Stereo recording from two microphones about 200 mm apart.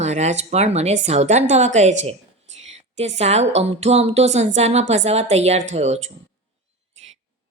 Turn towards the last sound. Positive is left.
turn(degrees=-35)  # may be behind; listen again after turning